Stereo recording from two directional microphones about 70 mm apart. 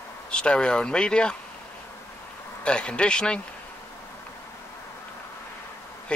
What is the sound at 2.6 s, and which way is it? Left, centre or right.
Speech, centre.